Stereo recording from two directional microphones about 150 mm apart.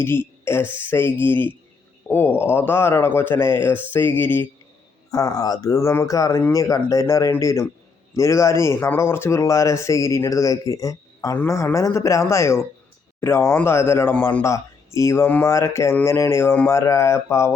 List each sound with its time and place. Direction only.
0.0 s speech: 15° left (ahead or behind)